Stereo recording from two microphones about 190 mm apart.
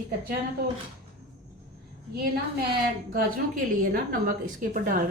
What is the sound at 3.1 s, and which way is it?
Speech, 45° right (ahead or behind).